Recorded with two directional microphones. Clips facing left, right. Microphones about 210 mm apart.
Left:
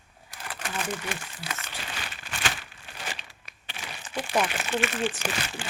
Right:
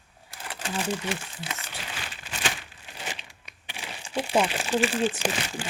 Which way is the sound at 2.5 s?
15° right (ahead or behind).